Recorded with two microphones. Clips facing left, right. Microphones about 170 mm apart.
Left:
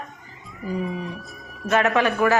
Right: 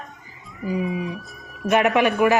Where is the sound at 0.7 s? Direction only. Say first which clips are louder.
Right 3 dB; centre (ahead or behind).